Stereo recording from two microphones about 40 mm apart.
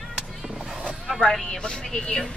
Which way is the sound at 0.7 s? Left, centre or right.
Right.